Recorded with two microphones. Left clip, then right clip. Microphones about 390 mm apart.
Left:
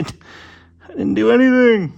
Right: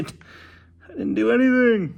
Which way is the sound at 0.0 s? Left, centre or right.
Left.